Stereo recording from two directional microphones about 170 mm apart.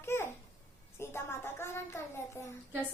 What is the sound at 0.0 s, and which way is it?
Babbling, 15° left (ahead or behind).